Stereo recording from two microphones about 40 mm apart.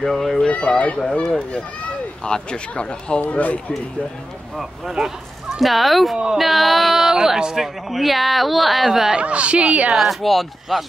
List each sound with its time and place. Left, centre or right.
0.0 s a woman's voice: centre
0.5 s speech: left
2.2 s speech: left
3.3 s speech: left
4.6 s a woman's voice: centre
9.1 s speech: right
9.9 s a woman's voice: centre